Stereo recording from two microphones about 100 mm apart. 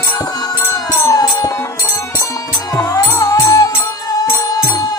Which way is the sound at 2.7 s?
40° left (ahead or behind).